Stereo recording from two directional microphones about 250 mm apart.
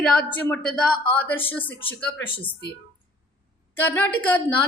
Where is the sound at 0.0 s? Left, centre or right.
Centre.